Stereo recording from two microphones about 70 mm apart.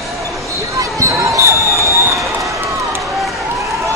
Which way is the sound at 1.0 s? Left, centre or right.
Right.